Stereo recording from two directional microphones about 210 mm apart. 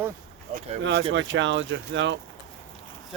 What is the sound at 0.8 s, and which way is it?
Speech, 60° right (ahead or behind).